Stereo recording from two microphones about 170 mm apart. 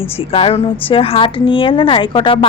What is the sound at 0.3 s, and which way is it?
Speech, 35° left (ahead or behind).